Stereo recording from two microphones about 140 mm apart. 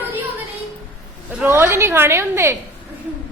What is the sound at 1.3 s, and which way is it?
A woman's voice, 15° right (ahead or behind).